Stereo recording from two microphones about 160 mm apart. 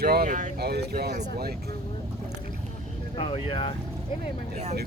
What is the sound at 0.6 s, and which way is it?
Speech, 85° right.